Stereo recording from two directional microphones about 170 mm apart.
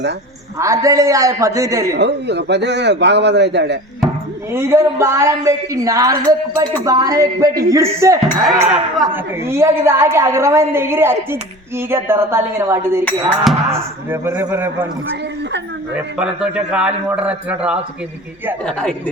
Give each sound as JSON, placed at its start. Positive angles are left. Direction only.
{"t": 0.6, "sound": "speech", "side_deg": -20}
{"t": 1.9, "sound": "a man's voice", "side_deg": -90}
{"t": 4.5, "sound": "speech", "side_deg": -15}
{"t": 8.6, "sound": "a man's voice", "side_deg": -5}
{"t": 9.1, "sound": "a woman's voice", "side_deg": -15}
{"t": 13.1, "sound": "a man's voice", "side_deg": 0}
{"t": 13.7, "sound": "a woman's voice", "side_deg": -15}
{"t": 16.0, "sound": "a man's voice", "side_deg": -5}
{"t": 18.6, "sound": "a man's voice", "side_deg": 5}